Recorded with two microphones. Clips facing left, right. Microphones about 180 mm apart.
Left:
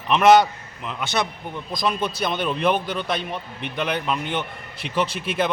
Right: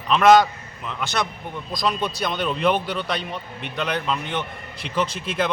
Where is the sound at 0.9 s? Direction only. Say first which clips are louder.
Left 1 dB; 5° left (ahead or behind).